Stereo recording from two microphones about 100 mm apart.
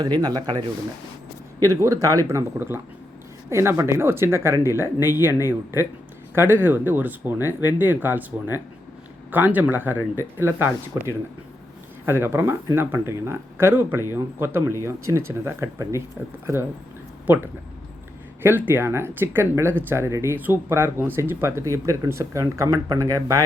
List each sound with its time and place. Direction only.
0.0 s speech: 45° right (ahead or behind)
1.6 s speech: 30° right (ahead or behind)
2.6 s speech: 20° right (ahead or behind)
18.4 s speech: 20° right (ahead or behind)